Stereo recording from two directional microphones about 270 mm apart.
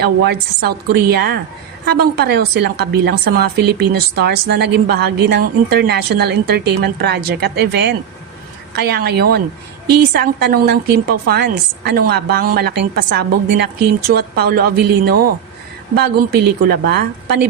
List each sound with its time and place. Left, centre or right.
0.0 s a woman's voice: right